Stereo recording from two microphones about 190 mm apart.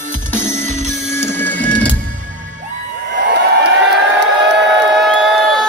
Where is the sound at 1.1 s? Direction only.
10° left (ahead or behind).